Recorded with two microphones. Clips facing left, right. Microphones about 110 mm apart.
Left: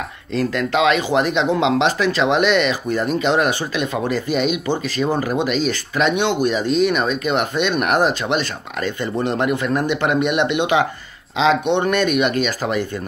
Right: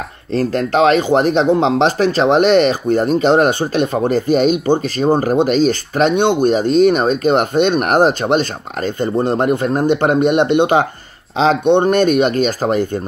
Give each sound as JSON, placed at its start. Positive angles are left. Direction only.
{"t": 0.3, "sound": "speech", "side_deg": -40}